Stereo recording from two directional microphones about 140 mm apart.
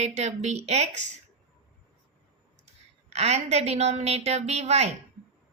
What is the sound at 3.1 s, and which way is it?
A woman's voice, 50° right (ahead or behind).